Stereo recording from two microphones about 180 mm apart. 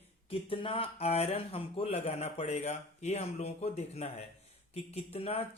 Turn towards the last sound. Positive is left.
turn(degrees=35)  # may be behind; listen again after turning